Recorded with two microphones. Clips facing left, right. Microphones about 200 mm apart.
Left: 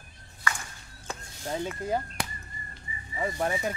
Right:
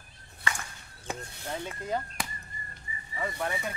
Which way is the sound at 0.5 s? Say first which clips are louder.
Left 2 dB; 25° right (ahead or behind).